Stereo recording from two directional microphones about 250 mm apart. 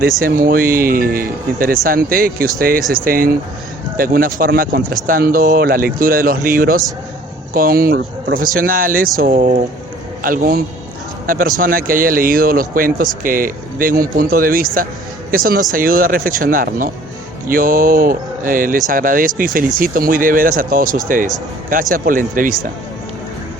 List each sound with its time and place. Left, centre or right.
0.2 s speech: right